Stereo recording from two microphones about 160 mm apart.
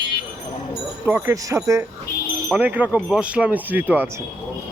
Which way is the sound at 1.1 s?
15° right (ahead or behind).